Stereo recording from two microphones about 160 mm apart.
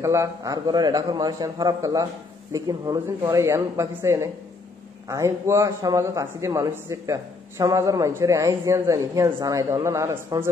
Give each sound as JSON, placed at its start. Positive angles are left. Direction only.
{"t": 0.0, "sound": "a man's voice", "side_deg": -20}